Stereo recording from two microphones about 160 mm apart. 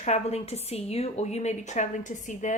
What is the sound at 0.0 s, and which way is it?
Speech, 45° left (ahead or behind).